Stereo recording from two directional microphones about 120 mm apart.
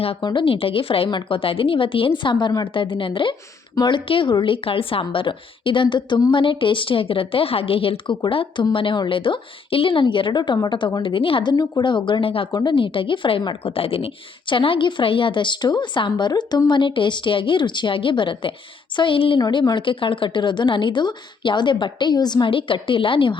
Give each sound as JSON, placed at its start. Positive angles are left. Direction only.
{"t": 0.0, "sound": "a woman's voice", "side_deg": 50}
{"t": 11.5, "sound": "speech", "side_deg": 30}
{"t": 12.5, "sound": "a woman's voice", "side_deg": 40}